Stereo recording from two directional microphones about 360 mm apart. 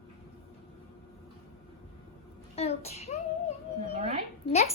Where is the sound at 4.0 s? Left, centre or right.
Centre.